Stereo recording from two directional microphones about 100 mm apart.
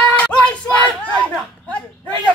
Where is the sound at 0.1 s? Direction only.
15° left (ahead or behind).